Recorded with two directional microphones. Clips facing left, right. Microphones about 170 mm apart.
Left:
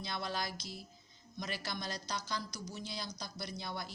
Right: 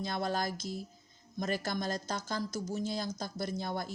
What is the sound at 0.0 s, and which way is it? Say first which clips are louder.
Speech: right 6 dB; 45° right (ahead or behind).